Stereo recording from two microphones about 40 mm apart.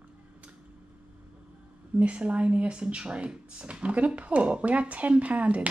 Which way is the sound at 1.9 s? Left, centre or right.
Right.